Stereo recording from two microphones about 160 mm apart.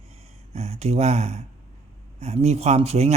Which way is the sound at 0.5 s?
40° right (ahead or behind).